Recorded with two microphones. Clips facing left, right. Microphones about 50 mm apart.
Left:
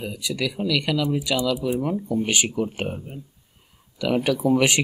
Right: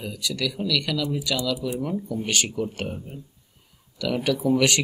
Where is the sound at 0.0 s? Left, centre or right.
Centre.